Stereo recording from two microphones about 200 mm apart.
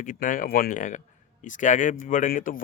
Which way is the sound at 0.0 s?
40° left (ahead or behind).